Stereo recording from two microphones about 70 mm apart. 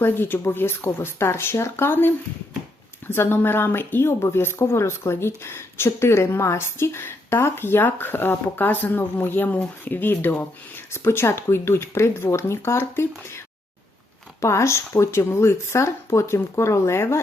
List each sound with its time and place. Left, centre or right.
0.0 s speech: left
14.4 s speech: left